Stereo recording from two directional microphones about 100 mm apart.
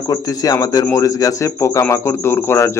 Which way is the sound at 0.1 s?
35° left (ahead or behind).